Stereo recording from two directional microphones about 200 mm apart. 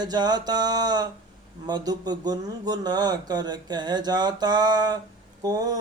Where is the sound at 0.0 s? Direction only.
20° right (ahead or behind).